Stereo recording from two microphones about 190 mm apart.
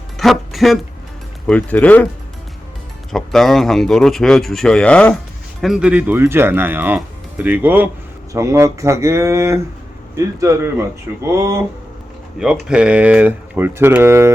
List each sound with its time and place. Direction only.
0.2 s music: centre (ahead or behind)
1.5 s speech: 5° left (ahead or behind)
3.1 s a man's voice: centre (ahead or behind); by 14.3 s 15° right (ahead or behind)